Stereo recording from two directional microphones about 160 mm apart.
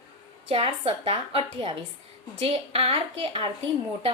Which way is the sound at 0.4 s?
35° right (ahead or behind).